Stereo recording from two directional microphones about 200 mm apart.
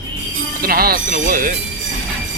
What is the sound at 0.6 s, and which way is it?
Speech, 50° right (ahead or behind).